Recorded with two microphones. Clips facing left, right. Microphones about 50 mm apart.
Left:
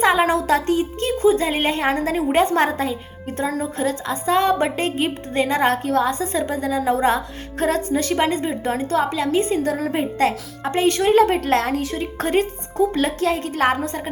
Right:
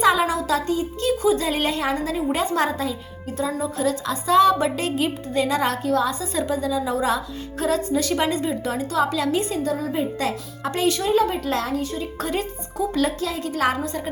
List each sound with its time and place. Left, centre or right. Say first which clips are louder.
0.0 s a woman's voice: left 2 dB; left
1.2 s a woman's voice: left 6 dB; left
9.6 s speech: left 2 dB; left
10.6 s speech: left 4 dB; left